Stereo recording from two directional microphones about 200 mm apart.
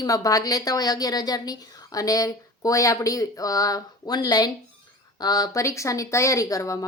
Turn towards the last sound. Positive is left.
turn(degrees=15)  # may be behind; listen again after turning